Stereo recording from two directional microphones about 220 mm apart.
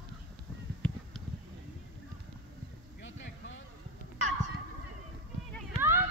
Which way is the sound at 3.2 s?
55° left (ahead or behind).